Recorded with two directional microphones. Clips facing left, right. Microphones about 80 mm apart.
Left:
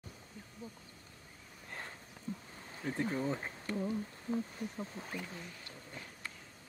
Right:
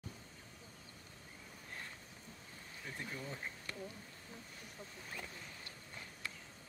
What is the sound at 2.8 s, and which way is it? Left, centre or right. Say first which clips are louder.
Speech: left 11 dB; left.